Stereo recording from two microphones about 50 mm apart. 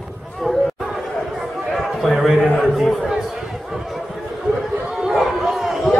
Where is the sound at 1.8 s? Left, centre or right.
Centre.